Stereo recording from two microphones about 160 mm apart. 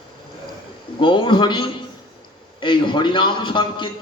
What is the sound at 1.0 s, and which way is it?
A man's voice, 30° left (ahead or behind).